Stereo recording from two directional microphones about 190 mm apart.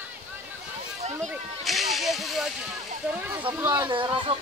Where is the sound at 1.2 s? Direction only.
Centre (ahead or behind).